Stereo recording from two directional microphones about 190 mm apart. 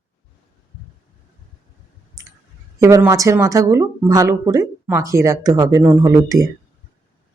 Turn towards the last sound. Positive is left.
turn(degrees=-15)  # may be behind; listen again after turning